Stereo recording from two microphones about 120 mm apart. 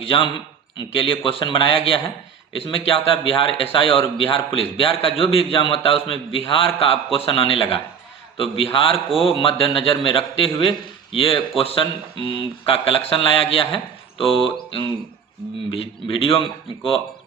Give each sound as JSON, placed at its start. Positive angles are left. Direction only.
{"t": 0.8, "sound": "speech", "side_deg": 45}
{"t": 15.7, "sound": "speech", "side_deg": 50}